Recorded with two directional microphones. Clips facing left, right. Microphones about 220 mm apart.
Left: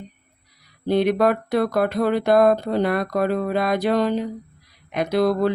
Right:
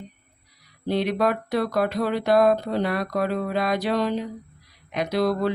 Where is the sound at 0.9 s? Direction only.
55° left (ahead or behind).